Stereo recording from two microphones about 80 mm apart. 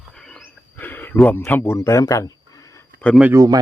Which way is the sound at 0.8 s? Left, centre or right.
Left.